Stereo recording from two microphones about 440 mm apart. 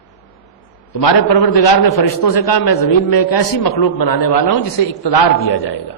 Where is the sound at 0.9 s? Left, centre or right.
Left.